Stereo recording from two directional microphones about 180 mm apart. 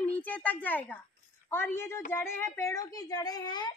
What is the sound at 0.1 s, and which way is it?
A woman's voice, 10° left (ahead or behind).